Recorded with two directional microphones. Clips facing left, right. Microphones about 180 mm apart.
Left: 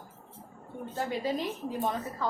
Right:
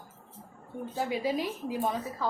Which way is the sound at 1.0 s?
10° right (ahead or behind).